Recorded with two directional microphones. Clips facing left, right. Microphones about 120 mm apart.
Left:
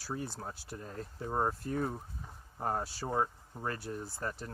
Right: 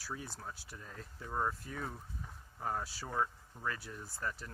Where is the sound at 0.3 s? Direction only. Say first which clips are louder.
Left 5 dB; 35° left (ahead or behind).